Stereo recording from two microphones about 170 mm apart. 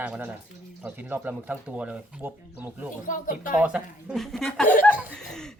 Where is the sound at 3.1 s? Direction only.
50° left (ahead or behind).